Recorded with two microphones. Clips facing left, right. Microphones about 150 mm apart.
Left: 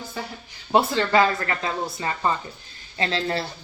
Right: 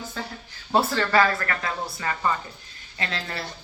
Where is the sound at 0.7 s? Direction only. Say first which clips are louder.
Left 2 dB; 15° left (ahead or behind).